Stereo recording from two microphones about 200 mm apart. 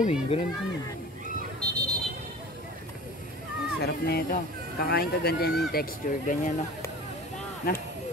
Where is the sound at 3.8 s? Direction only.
50° left (ahead or behind).